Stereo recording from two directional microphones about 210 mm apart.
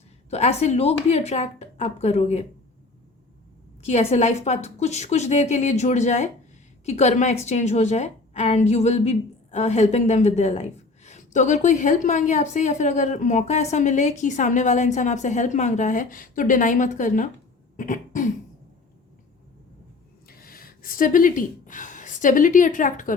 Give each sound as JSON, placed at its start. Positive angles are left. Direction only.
{"t": 0.3, "sound": "a woman's voice", "side_deg": 30}
{"t": 3.8, "sound": "a woman's voice", "side_deg": 30}
{"t": 17.7, "sound": "a sound", "side_deg": 40}
{"t": 20.2, "sound": "speech", "side_deg": 45}